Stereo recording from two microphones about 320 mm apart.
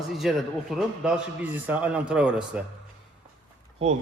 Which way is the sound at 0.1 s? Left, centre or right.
Centre.